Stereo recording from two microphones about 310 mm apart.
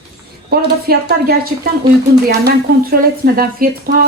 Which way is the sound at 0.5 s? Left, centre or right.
Right.